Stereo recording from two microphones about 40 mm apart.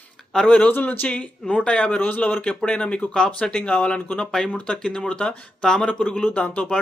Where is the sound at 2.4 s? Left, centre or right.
Left.